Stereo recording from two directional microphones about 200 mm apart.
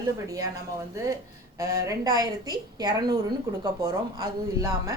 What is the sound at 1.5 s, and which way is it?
A woman's voice, 15° right (ahead or behind).